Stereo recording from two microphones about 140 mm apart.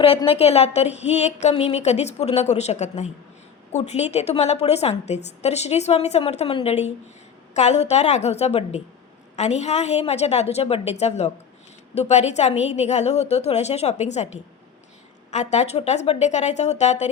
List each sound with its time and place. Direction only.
0.3 s a woman's voice: 45° left (ahead or behind)
15.3 s speech: 55° left (ahead or behind)